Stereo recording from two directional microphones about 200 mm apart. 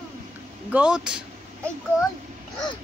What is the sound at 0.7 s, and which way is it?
Speech, 5° right (ahead or behind).